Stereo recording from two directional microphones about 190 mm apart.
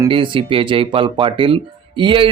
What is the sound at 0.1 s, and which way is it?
Speech, 25° right (ahead or behind).